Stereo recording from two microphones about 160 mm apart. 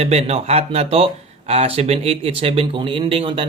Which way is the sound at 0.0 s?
40° right (ahead or behind).